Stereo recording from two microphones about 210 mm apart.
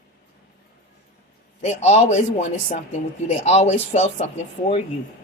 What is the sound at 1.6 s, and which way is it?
Speech, 35° left (ahead or behind).